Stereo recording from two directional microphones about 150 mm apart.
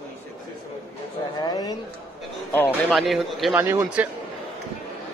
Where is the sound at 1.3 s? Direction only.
25° left (ahead or behind).